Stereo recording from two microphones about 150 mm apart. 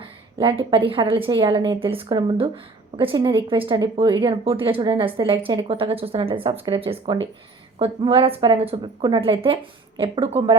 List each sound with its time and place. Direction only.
0.0 s a woman's voice: 35° right (ahead or behind)